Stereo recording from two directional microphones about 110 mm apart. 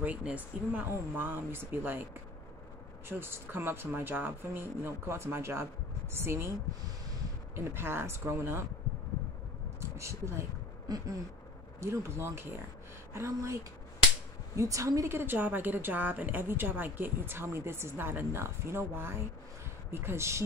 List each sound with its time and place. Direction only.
0.0 s a woman's voice: 10° right (ahead or behind)
3.1 s a woman's voice: 20° right (ahead or behind)
7.5 s a woman's voice: 20° right (ahead or behind)
9.8 s a sound: 25° right (ahead or behind)
11.8 s a woman's voice: 25° right (ahead or behind)
14.6 s a woman's voice: 30° right (ahead or behind)